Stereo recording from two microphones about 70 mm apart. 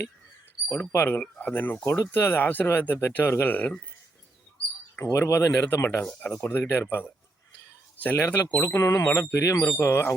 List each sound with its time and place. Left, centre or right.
0.8 s speech: left
1.8 s speech: left
4.9 s wind chime: left
5.5 s speech: left
5.7 s wind chime: left
6.1 s speech: centre
6.3 s speech: left
8.6 s wind chime: left